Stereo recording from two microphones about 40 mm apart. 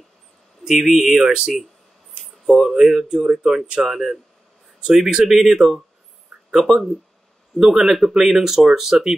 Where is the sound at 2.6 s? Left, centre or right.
Centre.